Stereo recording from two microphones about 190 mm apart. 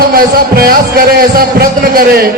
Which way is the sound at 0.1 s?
50° right (ahead or behind).